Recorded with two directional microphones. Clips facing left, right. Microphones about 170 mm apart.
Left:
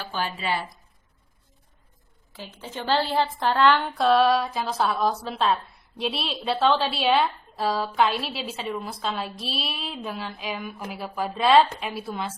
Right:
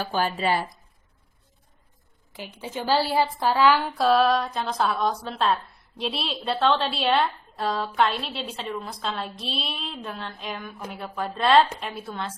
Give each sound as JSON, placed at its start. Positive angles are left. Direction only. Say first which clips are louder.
{"t": 0.0, "sound": "speech", "louder": "right 5 dB", "side_deg": -45}
{"t": 2.3, "sound": "a woman's voice", "louder": "right 3 dB", "side_deg": -15}